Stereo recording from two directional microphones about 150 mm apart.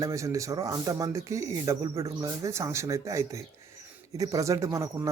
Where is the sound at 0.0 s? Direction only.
20° right (ahead or behind).